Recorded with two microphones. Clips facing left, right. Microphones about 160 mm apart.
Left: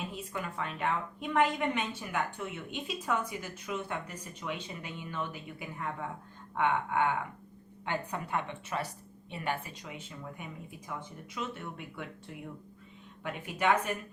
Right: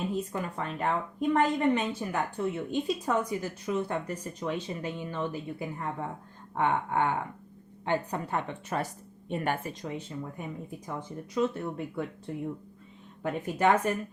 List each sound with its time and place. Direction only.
0.2 s a woman's voice: 40° right (ahead or behind)